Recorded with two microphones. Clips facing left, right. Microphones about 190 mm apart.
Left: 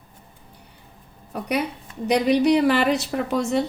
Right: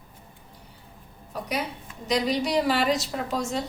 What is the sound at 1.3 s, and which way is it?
A woman's voice, 60° left (ahead or behind).